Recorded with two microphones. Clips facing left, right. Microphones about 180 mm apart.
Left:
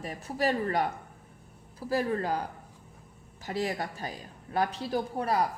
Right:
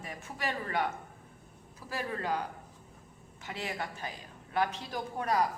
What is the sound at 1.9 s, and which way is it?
Speech, 35° left (ahead or behind).